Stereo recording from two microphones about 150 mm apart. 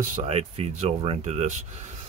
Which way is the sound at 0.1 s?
45° right (ahead or behind).